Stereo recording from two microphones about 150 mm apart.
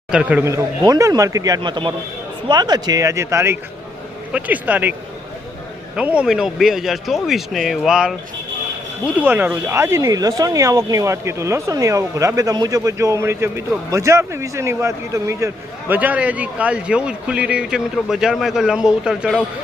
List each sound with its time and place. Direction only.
0.1 s speech: 10° right (ahead or behind)
6.0 s speech: 5° right (ahead or behind)
9.2 s speech: 10° right (ahead or behind)